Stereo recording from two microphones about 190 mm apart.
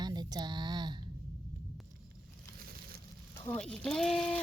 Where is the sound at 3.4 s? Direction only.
5° left (ahead or behind).